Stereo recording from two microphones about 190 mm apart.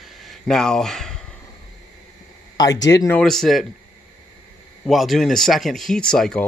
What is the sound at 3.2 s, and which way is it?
Speech, 5° left (ahead or behind).